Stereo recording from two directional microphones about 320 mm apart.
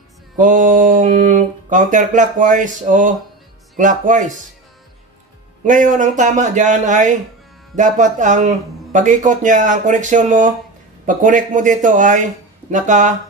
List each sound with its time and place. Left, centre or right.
0.4 s a man's voice: right
5.6 s a man's voice: right